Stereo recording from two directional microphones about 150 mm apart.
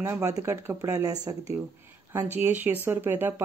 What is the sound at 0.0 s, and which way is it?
Speech, 15° right (ahead or behind).